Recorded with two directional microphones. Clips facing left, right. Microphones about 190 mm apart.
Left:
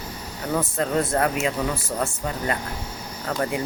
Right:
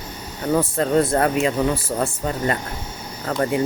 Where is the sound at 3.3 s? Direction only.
35° right (ahead or behind).